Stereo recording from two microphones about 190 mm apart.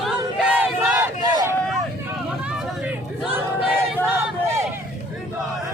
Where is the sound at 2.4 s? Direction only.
5° right (ahead or behind).